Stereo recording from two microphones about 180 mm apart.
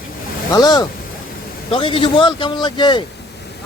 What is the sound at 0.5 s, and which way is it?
Speech, 20° left (ahead or behind).